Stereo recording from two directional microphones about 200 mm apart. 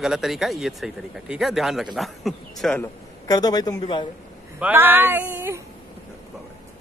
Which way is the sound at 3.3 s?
20° left (ahead or behind).